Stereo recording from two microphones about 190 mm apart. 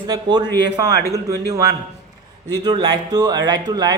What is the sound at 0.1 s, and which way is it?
Speech, 20° right (ahead or behind).